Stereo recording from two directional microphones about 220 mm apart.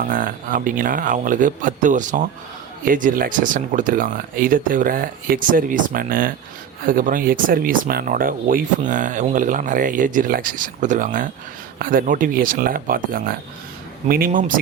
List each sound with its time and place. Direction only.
0.0 s speech: 40° right (ahead or behind)